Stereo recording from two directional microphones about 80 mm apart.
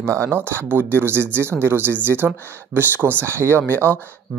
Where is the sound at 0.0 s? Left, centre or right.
Right.